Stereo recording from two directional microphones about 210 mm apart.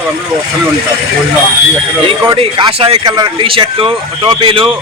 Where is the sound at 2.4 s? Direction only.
25° right (ahead or behind).